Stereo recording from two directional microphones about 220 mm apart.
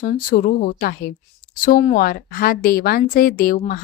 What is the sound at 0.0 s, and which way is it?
Speech, 40° left (ahead or behind).